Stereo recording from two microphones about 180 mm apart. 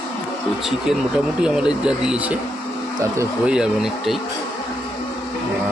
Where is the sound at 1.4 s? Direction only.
5° right (ahead or behind).